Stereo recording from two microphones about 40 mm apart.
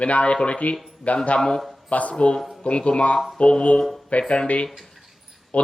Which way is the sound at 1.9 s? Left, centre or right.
Left.